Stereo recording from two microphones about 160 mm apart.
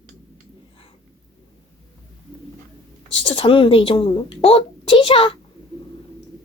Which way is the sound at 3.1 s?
35° left (ahead or behind).